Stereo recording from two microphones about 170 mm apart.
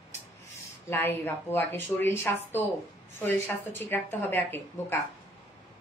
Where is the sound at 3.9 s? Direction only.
10° left (ahead or behind).